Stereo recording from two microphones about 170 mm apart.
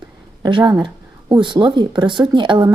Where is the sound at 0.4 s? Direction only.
25° right (ahead or behind).